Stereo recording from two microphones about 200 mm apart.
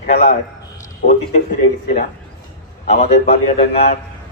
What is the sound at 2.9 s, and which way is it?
A man's voice, 30° left (ahead or behind).